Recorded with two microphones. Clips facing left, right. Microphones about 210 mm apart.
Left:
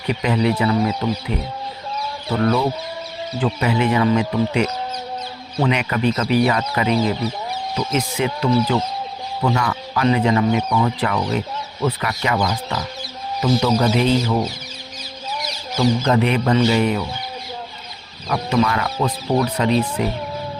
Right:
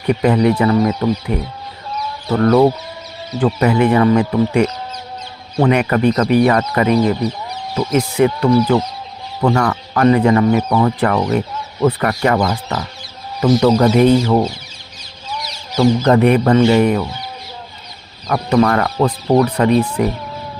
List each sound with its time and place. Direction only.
0.1 s speech: 50° right (ahead or behind)
15.8 s speech: 50° right (ahead or behind)
18.3 s speech: 50° right (ahead or behind)